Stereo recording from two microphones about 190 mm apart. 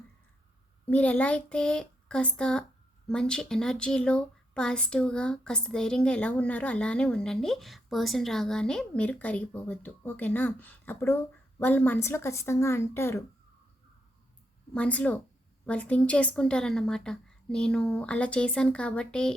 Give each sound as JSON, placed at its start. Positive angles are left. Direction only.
{"t": 0.9, "sound": "a woman's voice", "side_deg": 10}
{"t": 14.7, "sound": "a woman's voice", "side_deg": 5}